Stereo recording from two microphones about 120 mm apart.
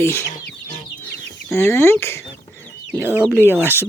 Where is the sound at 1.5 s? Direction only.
20° left (ahead or behind).